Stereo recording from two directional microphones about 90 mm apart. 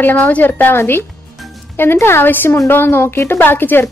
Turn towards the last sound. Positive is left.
turn(degrees=25)  # may be behind; listen again after turning